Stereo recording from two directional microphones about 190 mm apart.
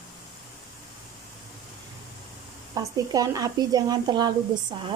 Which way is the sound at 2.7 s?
20° right (ahead or behind).